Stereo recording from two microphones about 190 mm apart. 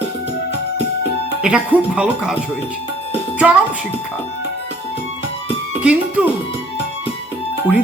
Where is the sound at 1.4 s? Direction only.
5° right (ahead or behind).